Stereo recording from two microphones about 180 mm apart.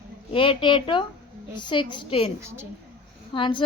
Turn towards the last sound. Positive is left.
turn(degrees=30)  # may be behind; listen again after turning